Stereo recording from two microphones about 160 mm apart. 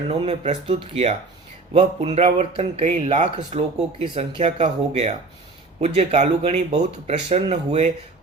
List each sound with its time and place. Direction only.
0.1 s speech: 40° right (ahead or behind)